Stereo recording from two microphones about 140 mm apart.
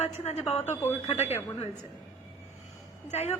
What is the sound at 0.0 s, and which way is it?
A woman's voice, 50° left (ahead or behind).